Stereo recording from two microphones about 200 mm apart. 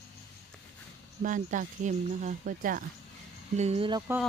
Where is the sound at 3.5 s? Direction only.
35° right (ahead or behind).